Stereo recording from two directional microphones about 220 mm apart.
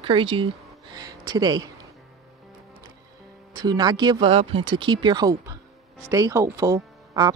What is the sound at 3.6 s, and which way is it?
Speech, 20° right (ahead or behind).